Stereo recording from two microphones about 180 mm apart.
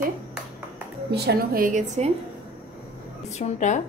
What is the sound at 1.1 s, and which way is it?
A woman's voice, 60° right (ahead or behind).